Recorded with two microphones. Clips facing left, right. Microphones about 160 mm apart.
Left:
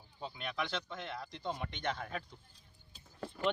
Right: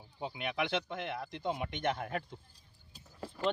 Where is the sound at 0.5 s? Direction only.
60° right (ahead or behind).